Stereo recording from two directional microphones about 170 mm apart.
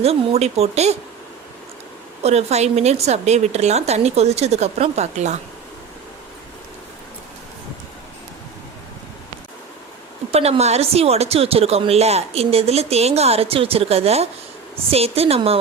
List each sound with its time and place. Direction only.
0.0 s speech: 35° right (ahead or behind)
2.2 s speech: 40° right (ahead or behind)
10.3 s speech: 35° right (ahead or behind)